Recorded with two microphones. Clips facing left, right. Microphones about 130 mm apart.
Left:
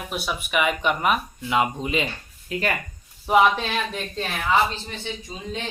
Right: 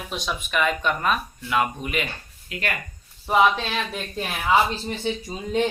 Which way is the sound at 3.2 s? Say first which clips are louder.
Left 1 dB; 5° left (ahead or behind).